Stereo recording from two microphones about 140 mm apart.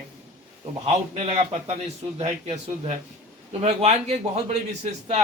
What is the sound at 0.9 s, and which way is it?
A man's voice, 45° right (ahead or behind).